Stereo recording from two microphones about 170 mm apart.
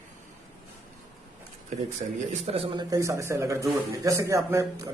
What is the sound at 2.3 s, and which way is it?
A man's voice, 35° right (ahead or behind).